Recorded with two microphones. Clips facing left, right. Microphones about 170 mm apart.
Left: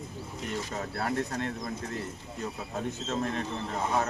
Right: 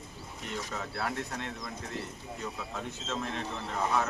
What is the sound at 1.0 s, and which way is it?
Speech, 40° left (ahead or behind).